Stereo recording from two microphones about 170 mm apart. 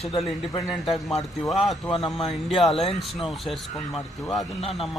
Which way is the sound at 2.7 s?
35° left (ahead or behind).